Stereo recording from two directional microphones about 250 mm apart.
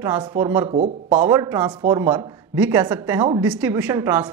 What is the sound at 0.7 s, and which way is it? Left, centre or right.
Speech, right.